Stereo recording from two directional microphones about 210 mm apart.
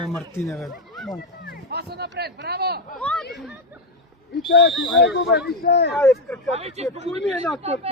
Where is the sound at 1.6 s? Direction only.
50° right (ahead or behind).